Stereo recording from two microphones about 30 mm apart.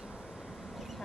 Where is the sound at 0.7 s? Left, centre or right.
Centre.